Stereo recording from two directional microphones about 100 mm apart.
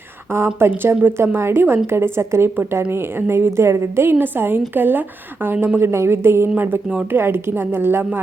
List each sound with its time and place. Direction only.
0.3 s a woman's voice: 25° right (ahead or behind)
6.8 s speech: 10° right (ahead or behind)
7.2 s a woman's voice: 25° right (ahead or behind)